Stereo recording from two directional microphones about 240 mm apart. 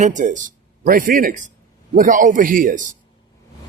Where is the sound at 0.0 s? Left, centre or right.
Right.